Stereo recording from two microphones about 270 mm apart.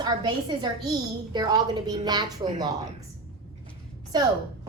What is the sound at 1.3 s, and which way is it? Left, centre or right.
A woman's voice, centre.